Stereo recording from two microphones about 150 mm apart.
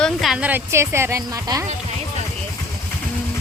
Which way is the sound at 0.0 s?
Centre (ahead or behind).